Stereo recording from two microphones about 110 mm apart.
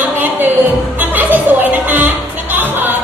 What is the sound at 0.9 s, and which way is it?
Music, 15° right (ahead or behind).